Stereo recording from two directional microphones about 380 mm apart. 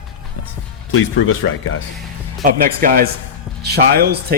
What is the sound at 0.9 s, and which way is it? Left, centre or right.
Speech, left.